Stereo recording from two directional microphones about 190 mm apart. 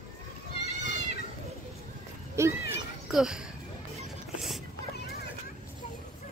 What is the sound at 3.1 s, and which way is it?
Speech, 5° right (ahead or behind).